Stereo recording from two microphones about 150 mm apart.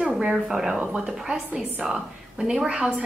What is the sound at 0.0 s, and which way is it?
A woman's voice, 5° right (ahead or behind).